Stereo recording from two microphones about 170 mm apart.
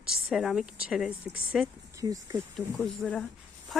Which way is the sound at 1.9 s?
20° right (ahead or behind).